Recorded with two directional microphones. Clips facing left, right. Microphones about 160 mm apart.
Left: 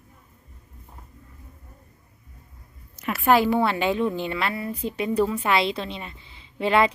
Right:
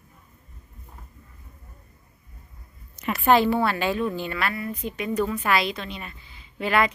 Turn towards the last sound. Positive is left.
turn(degrees=25)  # may be behind; listen again after turning